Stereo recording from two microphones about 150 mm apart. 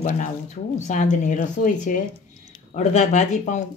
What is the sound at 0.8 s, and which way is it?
Speech, 55° left (ahead or behind).